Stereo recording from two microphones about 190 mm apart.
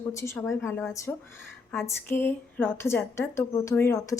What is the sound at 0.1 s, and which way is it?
A woman's voice, 15° left (ahead or behind).